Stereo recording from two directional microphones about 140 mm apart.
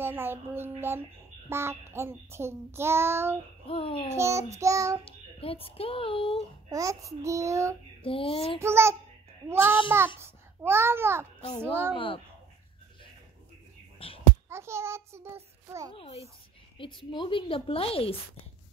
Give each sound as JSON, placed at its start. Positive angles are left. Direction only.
{"t": 0.0, "sound": "a child's voice", "side_deg": -15}
{"t": 3.6, "sound": "a child's voice", "side_deg": 40}
{"t": 4.1, "sound": "a child's voice", "side_deg": -20}
{"t": 5.0, "sound": "a child's voice", "side_deg": 40}
{"t": 6.7, "sound": "a child's voice", "side_deg": -25}
{"t": 8.0, "sound": "a child's voice", "side_deg": 40}
{"t": 8.5, "sound": "a child's voice", "side_deg": -20}
{"t": 11.9, "sound": "a child's voice", "side_deg": 40}
{"t": 13.9, "sound": "a sound", "side_deg": 40}
{"t": 14.5, "sound": "a child's voice", "side_deg": -20}
{"t": 16.7, "sound": "a child's voice", "side_deg": 35}